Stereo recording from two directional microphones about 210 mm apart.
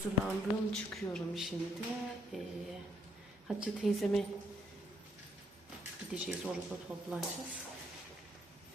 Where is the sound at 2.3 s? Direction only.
Centre (ahead or behind).